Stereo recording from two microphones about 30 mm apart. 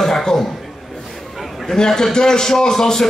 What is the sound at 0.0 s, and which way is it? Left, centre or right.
Chuckle, centre.